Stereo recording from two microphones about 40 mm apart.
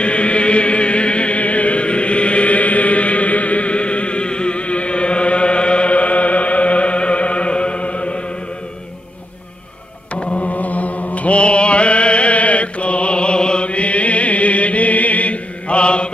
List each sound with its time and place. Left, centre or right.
0.0 s chant: left
10.1 s mantra: left
10.5 s mantra: left